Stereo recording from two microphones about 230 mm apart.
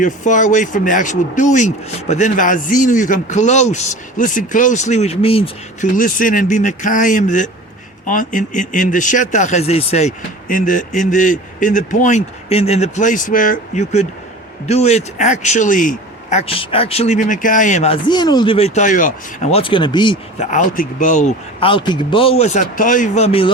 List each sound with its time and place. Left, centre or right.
0.0 s a man's voice: left